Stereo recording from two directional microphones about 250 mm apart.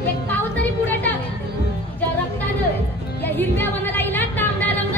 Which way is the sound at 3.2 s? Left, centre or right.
Centre.